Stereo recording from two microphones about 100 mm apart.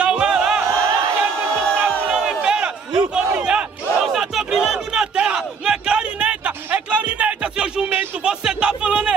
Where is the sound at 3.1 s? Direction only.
10° right (ahead or behind).